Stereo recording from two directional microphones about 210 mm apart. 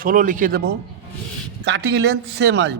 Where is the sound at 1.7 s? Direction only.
60° right (ahead or behind).